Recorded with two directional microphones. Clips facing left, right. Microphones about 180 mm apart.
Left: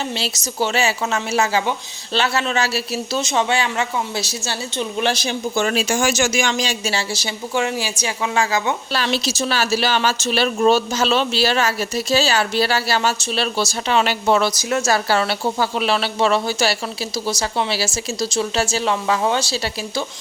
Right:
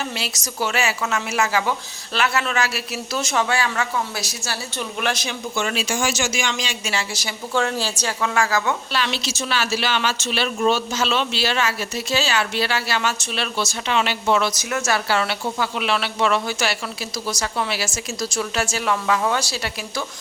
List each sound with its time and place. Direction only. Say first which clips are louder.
0.2 s speech: left 4 dB; 30° left (ahead or behind)
7.5 s a woman's voice: even; 10° left (ahead or behind)
8.9 s speech: left 3 dB; 40° left (ahead or behind)